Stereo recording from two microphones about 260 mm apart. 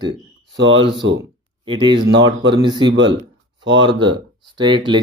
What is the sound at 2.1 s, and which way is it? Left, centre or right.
Speech, right.